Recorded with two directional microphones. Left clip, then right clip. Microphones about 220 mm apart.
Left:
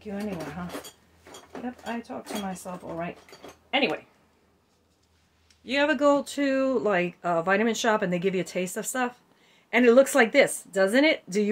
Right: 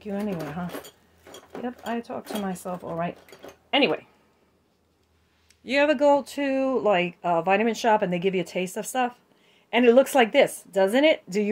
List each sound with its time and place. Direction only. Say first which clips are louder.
0.0 s speech: right 4 dB; 40° right (ahead or behind)
1.5 s speech: right 4 dB; 45° right (ahead or behind)
5.7 s speech: right 3 dB; 20° right (ahead or behind)
5.9 s a woman's voice: right 2 dB; 10° right (ahead or behind)